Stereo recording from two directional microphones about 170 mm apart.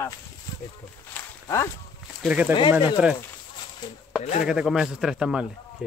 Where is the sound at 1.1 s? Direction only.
20° left (ahead or behind).